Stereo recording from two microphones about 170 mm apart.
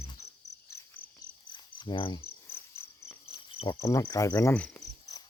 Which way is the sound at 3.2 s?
35° left (ahead or behind).